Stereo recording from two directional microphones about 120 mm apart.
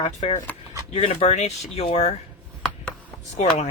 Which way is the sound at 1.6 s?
55° left (ahead or behind).